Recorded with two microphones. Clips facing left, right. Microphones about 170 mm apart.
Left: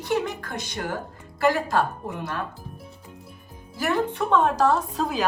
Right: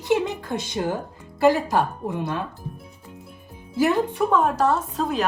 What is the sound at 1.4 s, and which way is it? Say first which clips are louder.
Speech: right 3 dB; 15° right (ahead or behind).